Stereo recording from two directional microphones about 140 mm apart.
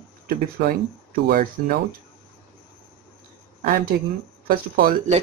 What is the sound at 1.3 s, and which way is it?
Speech, 90° right.